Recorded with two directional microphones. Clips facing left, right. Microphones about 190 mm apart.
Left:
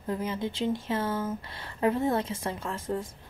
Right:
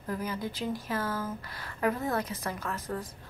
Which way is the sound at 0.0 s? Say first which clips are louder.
Left 3 dB; 25° left (ahead or behind).